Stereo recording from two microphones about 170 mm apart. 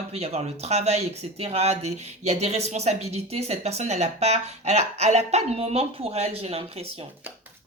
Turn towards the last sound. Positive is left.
turn(degrees=-35)  # may be behind; listen again after turning